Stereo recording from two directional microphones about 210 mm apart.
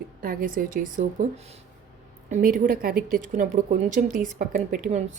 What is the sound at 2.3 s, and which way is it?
A woman's voice, 40° right (ahead or behind).